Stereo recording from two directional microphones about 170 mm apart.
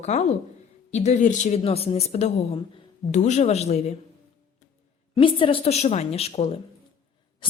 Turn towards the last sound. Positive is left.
turn(degrees=30)  # may be behind; listen again after turning